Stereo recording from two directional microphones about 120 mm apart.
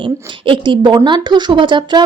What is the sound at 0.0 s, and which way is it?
A woman's voice, 45° right (ahead or behind).